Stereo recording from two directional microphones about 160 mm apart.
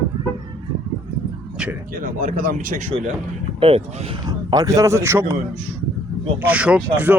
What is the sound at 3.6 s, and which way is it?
Speech, 35° right (ahead or behind).